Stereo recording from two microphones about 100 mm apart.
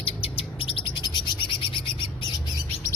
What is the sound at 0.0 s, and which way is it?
Bird, 70° left (ahead or behind).